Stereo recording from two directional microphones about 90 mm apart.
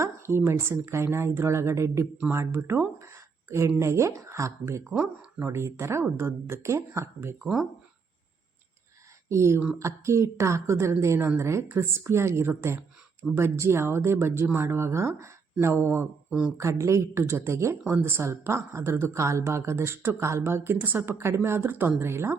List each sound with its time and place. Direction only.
0.0 s a woman's voice: 30° right (ahead or behind)
7.4 s speech: 5° right (ahead or behind)
9.3 s a woman's voice: 30° right (ahead or behind); by 16.5 s 15° right (ahead or behind)
16.6 s a woman's voice: 35° right (ahead or behind)